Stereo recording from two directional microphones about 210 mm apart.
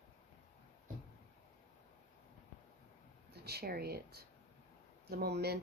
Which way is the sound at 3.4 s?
50° right (ahead or behind).